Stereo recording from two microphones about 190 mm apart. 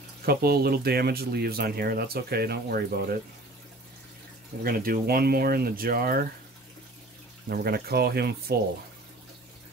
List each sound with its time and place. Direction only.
0.2 s speech: 55° right (ahead or behind)
4.6 s speech: 50° right (ahead or behind)
7.4 s speech: 55° right (ahead or behind)